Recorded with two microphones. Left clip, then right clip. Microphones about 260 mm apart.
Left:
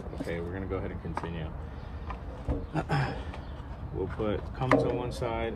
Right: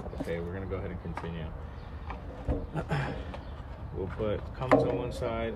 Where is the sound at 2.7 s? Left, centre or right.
Centre.